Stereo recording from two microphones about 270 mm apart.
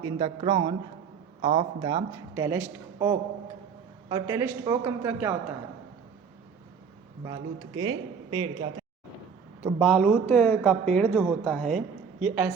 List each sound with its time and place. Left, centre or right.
0.0 s a man's voice: centre
7.8 s a man's voice: centre
9.8 s speech: centre